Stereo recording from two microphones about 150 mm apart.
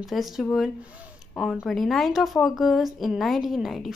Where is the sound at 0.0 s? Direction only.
Centre (ahead or behind).